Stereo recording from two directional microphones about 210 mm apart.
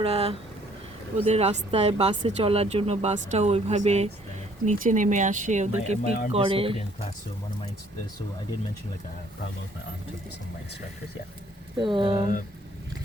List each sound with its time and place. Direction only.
0.0 s speech: 30° right (ahead or behind)
11.8 s speech: 20° right (ahead or behind)